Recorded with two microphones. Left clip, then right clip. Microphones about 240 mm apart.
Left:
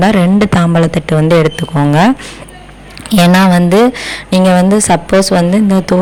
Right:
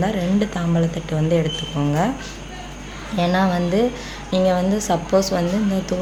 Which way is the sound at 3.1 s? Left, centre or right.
Left.